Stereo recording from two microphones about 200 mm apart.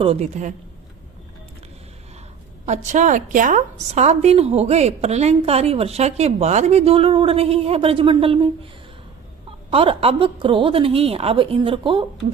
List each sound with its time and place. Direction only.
0.0 s a woman's voice: 30° right (ahead or behind)
2.6 s a woman's voice: 35° right (ahead or behind)
9.6 s a woman's voice: 25° right (ahead or behind)